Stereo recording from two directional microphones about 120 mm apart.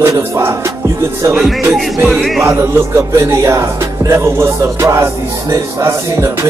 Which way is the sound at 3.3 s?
25° right (ahead or behind).